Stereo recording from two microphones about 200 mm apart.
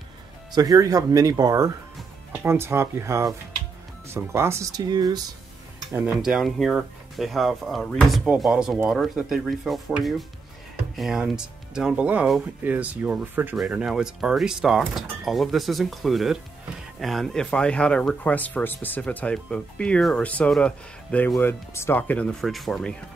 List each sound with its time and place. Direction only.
0.5 s speech: 20° right (ahead or behind)
5.9 s speech: 5° right (ahead or behind)